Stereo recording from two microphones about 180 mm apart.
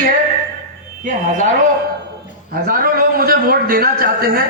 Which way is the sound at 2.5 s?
55° right (ahead or behind).